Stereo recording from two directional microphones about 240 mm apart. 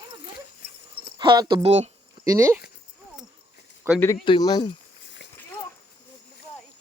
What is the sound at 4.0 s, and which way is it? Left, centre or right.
Speech, centre.